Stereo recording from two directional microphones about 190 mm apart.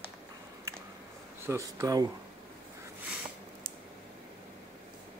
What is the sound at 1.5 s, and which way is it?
Speech, 15° right (ahead or behind).